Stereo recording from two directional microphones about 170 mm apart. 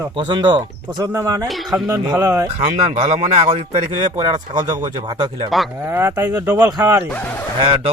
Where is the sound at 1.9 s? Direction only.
15° right (ahead or behind).